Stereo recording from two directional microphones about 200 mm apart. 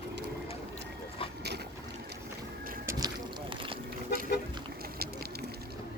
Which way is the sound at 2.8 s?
20° right (ahead or behind).